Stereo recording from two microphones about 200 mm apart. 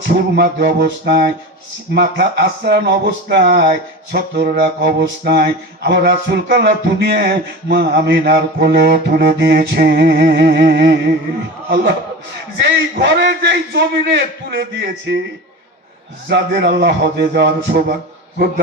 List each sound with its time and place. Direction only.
0.1 s mantra: 55° right (ahead or behind)
2.0 s a man's voice: 55° right (ahead or behind)
4.1 s mantra: 50° right (ahead or behind)
12.5 s a man's voice: 55° right (ahead or behind)
16.3 s a man's voice: 55° right (ahead or behind)